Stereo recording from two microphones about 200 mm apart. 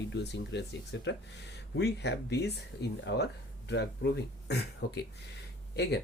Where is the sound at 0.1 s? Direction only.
60° left (ahead or behind).